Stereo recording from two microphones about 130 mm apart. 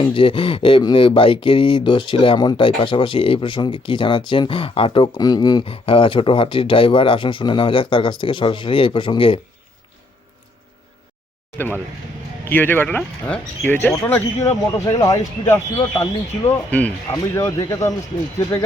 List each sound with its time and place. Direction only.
0.0 s speech: 40° left (ahead or behind)
5.6 s speech: 45° left (ahead or behind)
11.5 s speech: 15° left (ahead or behind)